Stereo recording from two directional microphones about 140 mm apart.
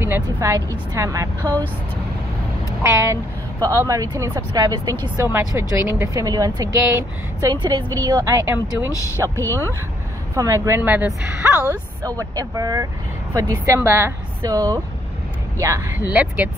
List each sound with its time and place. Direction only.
0.0 s a woman's voice: 20° right (ahead or behind)
2.8 s a woman's voice: 20° right (ahead or behind)
10.8 s a woman's voice: 10° right (ahead or behind)
12.0 s a woman's voice: 25° right (ahead or behind)
16.1 s a woman's voice: 10° right (ahead or behind)